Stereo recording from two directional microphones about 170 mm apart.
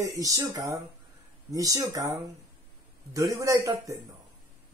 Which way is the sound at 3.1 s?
20° right (ahead or behind).